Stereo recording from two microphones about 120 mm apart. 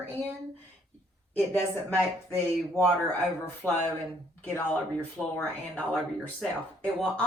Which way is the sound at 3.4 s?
15° left (ahead or behind).